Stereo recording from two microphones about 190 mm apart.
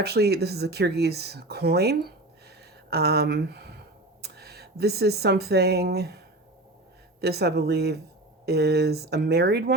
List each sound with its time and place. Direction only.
0.0 s speech: 60° right (ahead or behind)